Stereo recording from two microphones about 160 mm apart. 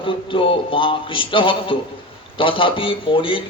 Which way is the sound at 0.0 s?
35° left (ahead or behind).